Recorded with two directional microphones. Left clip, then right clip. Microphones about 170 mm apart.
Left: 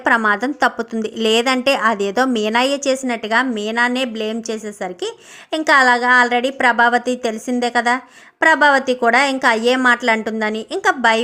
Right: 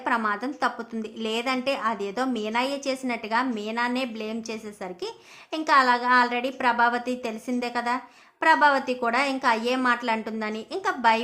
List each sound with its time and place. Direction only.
0.0 s a woman's voice: 35° left (ahead or behind)